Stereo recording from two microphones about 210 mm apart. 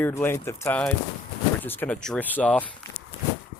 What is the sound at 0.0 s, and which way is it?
Speech, 10° left (ahead or behind).